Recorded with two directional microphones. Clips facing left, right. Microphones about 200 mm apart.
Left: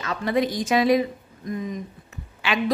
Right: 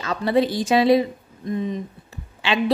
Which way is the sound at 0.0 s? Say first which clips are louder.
Right 3 dB; 30° right (ahead or behind).